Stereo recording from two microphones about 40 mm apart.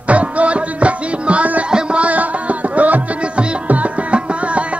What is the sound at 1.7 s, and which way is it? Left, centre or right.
Music, centre.